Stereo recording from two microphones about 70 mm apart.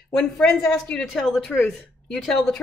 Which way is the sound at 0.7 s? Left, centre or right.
Centre.